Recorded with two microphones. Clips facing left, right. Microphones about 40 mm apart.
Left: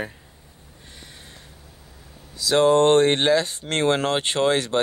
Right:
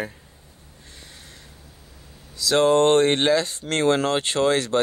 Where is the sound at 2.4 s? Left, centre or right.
Centre.